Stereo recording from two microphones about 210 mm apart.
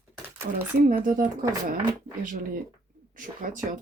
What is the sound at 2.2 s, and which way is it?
Speech, 40° right (ahead or behind).